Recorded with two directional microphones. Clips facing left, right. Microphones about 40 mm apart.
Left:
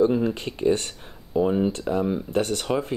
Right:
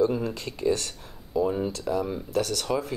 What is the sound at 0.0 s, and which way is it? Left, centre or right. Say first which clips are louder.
Speech: left 4 dB; left.